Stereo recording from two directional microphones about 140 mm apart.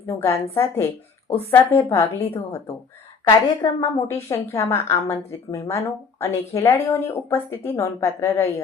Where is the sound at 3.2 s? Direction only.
25° left (ahead or behind).